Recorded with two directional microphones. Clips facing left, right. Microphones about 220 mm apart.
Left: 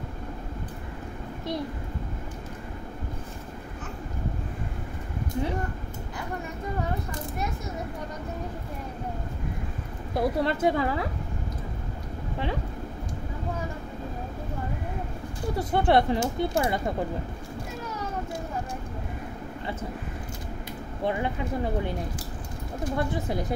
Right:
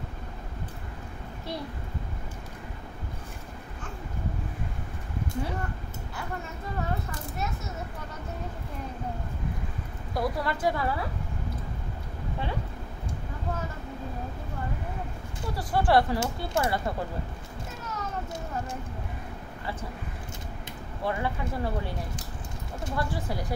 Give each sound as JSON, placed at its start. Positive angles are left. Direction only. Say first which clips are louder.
{"t": 10.1, "sound": "speech", "louder": "left 4 dB", "side_deg": 25}
{"t": 15.5, "sound": "speech", "louder": "left 1 dB", "side_deg": 20}
{"t": 21.0, "sound": "speech", "louder": "left 2 dB", "side_deg": 20}
{"t": 22.9, "sound": "speech", "louder": "left 3 dB", "side_deg": 20}